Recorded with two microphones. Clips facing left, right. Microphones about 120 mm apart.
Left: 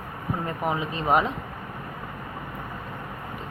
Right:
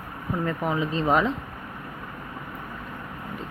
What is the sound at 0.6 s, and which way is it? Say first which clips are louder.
Speech: right 1 dB; 15° left (ahead or behind).